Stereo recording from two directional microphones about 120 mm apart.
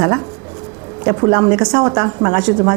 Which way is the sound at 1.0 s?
25° right (ahead or behind).